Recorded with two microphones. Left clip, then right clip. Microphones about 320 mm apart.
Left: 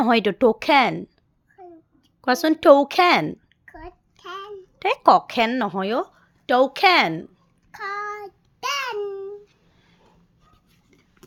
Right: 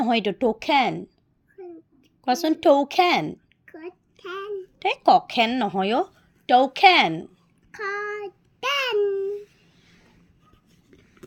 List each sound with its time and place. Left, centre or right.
0.0 s speech: left
2.2 s speech: left
3.3 s babbling: centre
4.8 s a woman's voice: left
7.7 s child singing: centre